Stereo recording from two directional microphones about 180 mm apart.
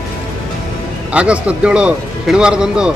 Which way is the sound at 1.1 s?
5° right (ahead or behind).